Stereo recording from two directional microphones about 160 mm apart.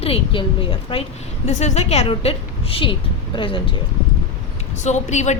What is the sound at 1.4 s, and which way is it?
A woman's voice, 45° left (ahead or behind).